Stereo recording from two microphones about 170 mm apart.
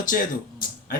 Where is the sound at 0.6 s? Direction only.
55° left (ahead or behind).